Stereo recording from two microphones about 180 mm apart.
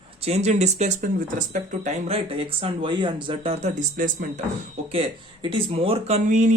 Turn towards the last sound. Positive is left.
turn(degrees=-45)  # may be behind; listen again after turning